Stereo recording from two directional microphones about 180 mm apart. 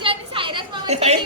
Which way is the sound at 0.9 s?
40° right (ahead or behind).